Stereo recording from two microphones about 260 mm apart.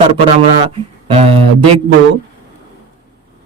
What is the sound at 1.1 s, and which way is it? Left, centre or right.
Speech, right.